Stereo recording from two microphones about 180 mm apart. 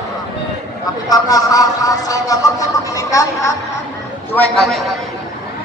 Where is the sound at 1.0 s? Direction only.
20° left (ahead or behind).